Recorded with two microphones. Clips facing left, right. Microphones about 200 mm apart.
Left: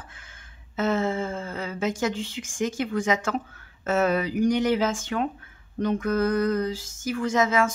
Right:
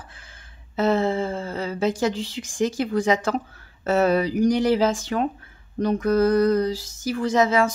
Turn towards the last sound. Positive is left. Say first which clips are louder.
# right 3 dB
turn(degrees=-35)  # may be behind; listen again after turning